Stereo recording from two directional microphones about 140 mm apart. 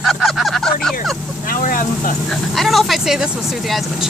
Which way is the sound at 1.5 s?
75° left (ahead or behind).